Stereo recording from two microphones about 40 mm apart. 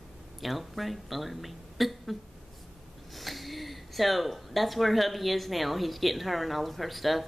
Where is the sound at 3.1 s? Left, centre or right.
Centre.